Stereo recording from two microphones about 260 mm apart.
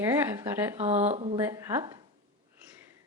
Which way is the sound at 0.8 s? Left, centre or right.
Right.